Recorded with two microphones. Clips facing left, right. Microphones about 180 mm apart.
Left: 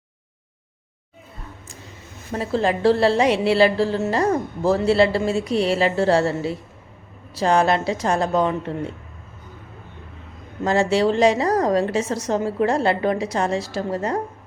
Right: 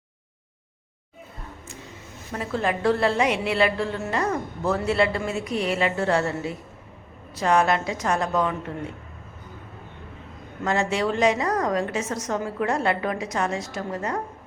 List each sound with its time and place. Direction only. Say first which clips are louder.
2.3 s a woman's voice: left 5 dB; 30° left (ahead or behind)
10.6 s a woman's voice: left 5 dB; 30° left (ahead or behind)